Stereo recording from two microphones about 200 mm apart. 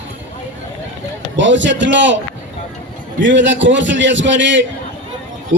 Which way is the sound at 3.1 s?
65° right (ahead or behind).